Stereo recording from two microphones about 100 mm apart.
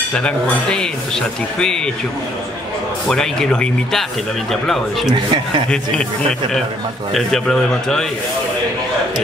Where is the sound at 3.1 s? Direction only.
5° left (ahead or behind).